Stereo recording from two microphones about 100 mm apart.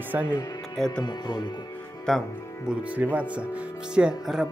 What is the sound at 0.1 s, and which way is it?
Speech, 15° right (ahead or behind).